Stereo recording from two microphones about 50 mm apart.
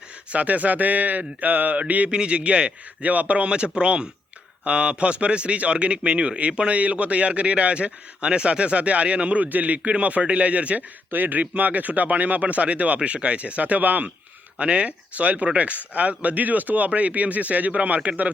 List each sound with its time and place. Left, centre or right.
0.3 s a man's voice: right
14.6 s a man's voice: right